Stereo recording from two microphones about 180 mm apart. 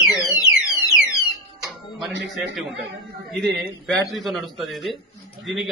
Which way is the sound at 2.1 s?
75° right (ahead or behind).